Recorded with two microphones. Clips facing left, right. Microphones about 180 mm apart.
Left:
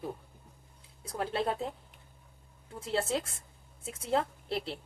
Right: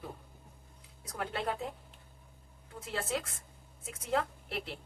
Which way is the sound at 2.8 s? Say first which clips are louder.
Left 5 dB; 30° left (ahead or behind).